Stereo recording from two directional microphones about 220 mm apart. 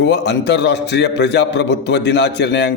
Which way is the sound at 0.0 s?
50° left (ahead or behind).